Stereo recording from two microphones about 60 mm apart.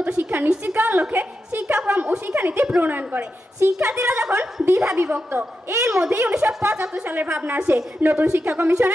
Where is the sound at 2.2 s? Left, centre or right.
Right.